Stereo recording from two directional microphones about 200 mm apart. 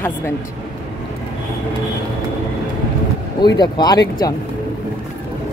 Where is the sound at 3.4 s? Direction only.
20° left (ahead or behind).